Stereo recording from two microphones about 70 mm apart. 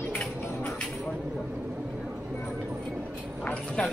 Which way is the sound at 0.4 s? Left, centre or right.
Left.